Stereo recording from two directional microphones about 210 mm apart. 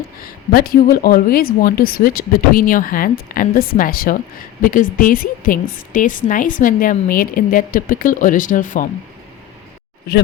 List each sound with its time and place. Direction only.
0.5 s a woman's voice: 45° left (ahead or behind)